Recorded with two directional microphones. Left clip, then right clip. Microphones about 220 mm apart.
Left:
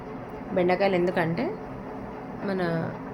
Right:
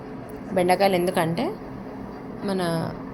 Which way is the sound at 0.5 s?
5° right (ahead or behind).